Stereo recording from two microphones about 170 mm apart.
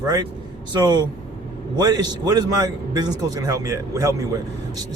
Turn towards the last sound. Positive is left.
turn(degrees=-20)  # may be behind; listen again after turning